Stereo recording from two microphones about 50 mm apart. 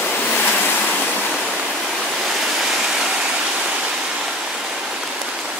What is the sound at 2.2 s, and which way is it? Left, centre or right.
Waterfall, centre.